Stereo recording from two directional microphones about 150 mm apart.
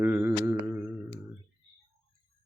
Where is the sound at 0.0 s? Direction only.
15° right (ahead or behind).